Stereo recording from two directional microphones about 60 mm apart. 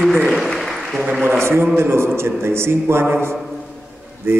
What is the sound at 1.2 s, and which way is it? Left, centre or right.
A man's voice, right.